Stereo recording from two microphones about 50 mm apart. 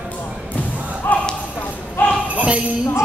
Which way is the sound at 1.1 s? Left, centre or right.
Left.